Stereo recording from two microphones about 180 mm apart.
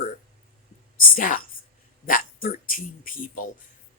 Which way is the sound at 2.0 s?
50° left (ahead or behind).